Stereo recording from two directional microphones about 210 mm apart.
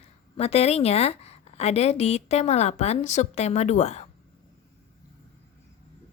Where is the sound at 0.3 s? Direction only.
30° left (ahead or behind).